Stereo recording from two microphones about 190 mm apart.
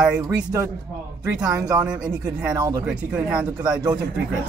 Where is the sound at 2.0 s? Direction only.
5° right (ahead or behind).